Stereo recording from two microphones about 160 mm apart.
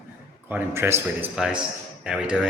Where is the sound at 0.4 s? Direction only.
15° right (ahead or behind).